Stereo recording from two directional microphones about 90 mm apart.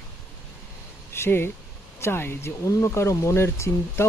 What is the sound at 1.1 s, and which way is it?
Speech, 25° left (ahead or behind).